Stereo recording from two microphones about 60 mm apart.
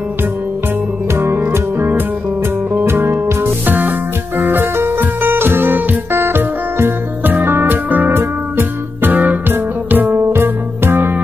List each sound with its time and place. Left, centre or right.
1.1 s music: right
8.1 s music: right